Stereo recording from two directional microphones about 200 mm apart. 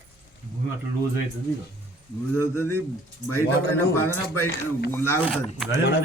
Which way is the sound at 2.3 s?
10° left (ahead or behind).